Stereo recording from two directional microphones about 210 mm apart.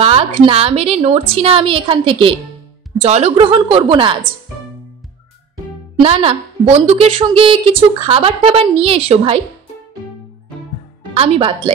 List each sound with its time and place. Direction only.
0.0 s a woman's voice: 25° right (ahead or behind)
5.9 s a woman's voice: 25° right (ahead or behind)
11.1 s a woman's voice: 25° right (ahead or behind)